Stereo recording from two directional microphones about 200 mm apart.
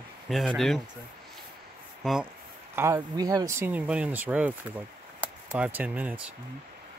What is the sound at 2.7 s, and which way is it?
Speech, 15° right (ahead or behind).